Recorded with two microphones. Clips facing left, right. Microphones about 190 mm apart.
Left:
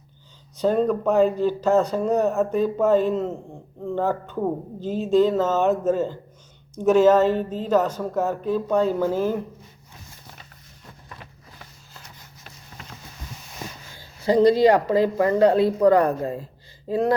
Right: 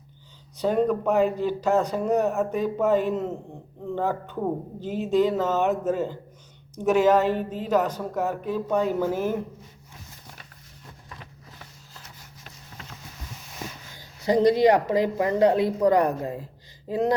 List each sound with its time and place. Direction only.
0.5 s speech: 15° right (ahead or behind)
13.9 s speech: 15° right (ahead or behind)